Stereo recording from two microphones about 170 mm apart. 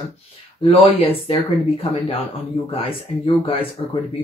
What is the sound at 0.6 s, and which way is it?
Speech, 35° left (ahead or behind).